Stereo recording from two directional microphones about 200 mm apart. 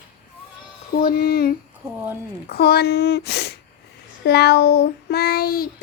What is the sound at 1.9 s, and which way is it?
Speech, 10° right (ahead or behind).